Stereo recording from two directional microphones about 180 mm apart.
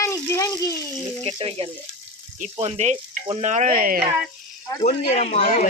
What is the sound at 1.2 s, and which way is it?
Speech, 35° right (ahead or behind).